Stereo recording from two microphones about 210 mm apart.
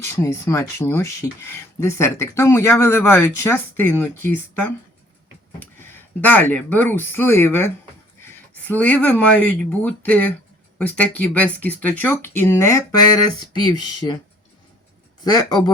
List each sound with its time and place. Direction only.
0.0 s speech: 15° left (ahead or behind)
15.2 s speech: 20° left (ahead or behind)